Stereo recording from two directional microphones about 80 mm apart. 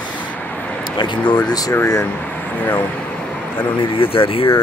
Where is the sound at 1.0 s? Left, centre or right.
Left.